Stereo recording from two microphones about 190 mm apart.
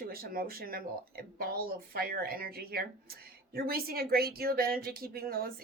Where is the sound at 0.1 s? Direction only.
50° right (ahead or behind).